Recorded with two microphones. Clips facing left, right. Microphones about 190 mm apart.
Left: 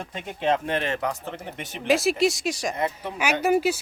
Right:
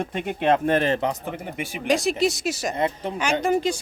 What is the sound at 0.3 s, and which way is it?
Speech, 55° right (ahead or behind).